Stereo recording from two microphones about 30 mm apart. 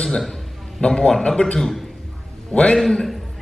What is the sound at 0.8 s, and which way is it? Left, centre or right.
Speech, left.